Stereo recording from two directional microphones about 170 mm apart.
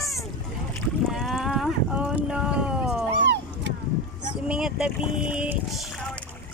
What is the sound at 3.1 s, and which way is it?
Vehicle, 90° right.